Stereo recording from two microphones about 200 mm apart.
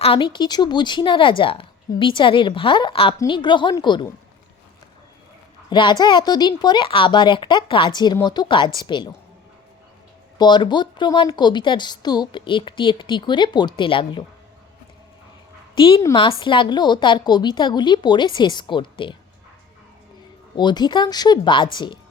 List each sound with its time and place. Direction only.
0.0 s a woman's voice: 25° left (ahead or behind)
5.6 s a woman's voice: 25° left (ahead or behind)
10.3 s a woman's voice: 20° left (ahead or behind)
15.7 s a woman's voice: 25° left (ahead or behind)
20.6 s a woman's voice: 20° left (ahead or behind)